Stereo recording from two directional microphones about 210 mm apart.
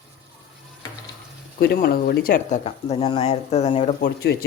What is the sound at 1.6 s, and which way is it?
Speech, 50° left (ahead or behind).